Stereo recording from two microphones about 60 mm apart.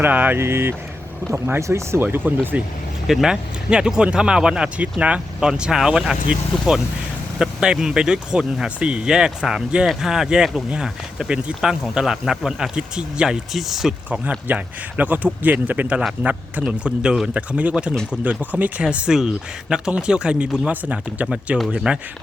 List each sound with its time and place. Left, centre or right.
0.0 s speech: right
0.3 s speech: right
2.0 s speech: right
3.1 s speech: centre
14.1 s speech: right